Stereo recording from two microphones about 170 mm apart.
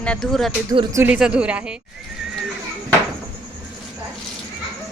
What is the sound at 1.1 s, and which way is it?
Speech, 5° right (ahead or behind).